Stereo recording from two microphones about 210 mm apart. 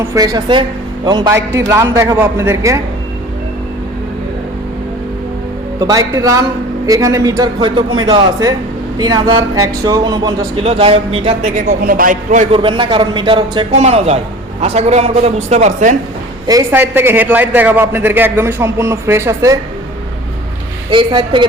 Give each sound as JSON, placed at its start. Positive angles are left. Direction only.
{"t": 0.0, "sound": "a man's voice", "side_deg": -15}
{"t": 5.8, "sound": "a man's voice", "side_deg": -15}
{"t": 11.8, "sound": "a man's voice", "side_deg": -40}
{"t": 16.5, "sound": "a man's voice", "side_deg": -15}
{"t": 20.9, "sound": "a man's voice", "side_deg": -20}